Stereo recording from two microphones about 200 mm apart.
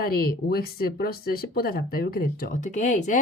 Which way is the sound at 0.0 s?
50° left (ahead or behind).